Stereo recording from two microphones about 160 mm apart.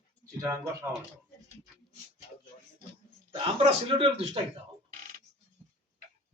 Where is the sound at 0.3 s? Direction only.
20° right (ahead or behind).